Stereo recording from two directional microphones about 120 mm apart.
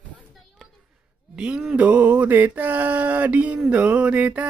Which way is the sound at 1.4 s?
5° right (ahead or behind).